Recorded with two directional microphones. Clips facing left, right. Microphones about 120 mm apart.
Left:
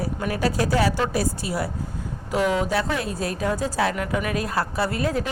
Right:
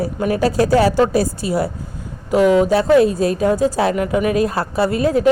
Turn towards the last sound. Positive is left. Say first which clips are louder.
# right 8 dB
turn(degrees=-20)  # may be behind; listen again after turning